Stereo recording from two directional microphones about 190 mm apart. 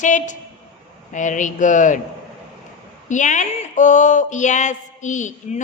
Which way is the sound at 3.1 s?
40° left (ahead or behind).